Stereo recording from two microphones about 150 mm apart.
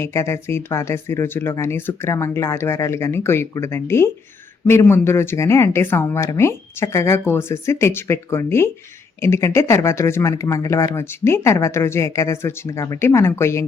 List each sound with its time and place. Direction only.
0.0 s speech: 20° left (ahead or behind)